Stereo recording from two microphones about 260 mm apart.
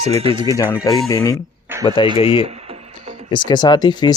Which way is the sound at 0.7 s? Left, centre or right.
Centre.